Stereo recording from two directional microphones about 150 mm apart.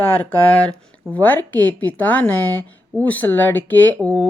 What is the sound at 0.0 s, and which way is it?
Speech, 10° left (ahead or behind).